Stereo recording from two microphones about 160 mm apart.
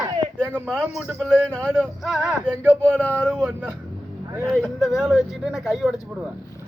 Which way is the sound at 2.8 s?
10° left (ahead or behind).